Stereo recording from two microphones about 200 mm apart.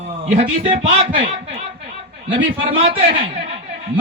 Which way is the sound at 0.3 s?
30° right (ahead or behind).